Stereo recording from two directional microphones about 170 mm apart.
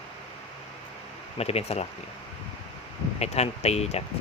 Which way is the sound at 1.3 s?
35° left (ahead or behind).